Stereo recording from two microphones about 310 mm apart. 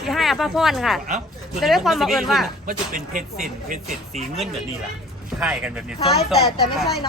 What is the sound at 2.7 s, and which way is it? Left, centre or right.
Speech, right.